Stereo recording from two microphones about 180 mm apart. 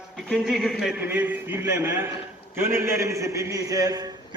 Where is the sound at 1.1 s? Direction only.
10° right (ahead or behind).